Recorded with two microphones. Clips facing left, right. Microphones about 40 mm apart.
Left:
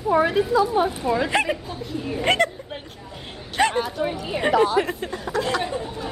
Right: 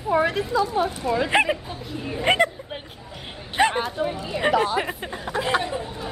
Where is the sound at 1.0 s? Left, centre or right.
Centre.